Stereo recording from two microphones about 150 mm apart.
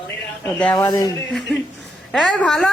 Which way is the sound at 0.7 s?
25° left (ahead or behind).